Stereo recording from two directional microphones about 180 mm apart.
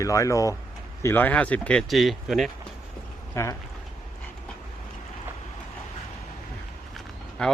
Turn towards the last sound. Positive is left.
turn(degrees=5)  # may be behind; listen again after turning